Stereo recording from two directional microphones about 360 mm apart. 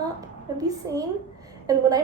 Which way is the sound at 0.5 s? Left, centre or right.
Centre.